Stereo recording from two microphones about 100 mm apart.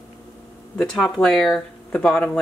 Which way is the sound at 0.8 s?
5° left (ahead or behind).